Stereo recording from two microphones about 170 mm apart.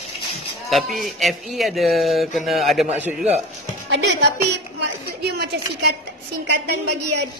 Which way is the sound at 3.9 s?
85° right.